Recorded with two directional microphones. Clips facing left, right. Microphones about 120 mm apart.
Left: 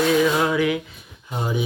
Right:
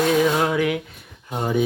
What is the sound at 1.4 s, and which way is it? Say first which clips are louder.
Speech: right 4 dB; 50° right (ahead or behind).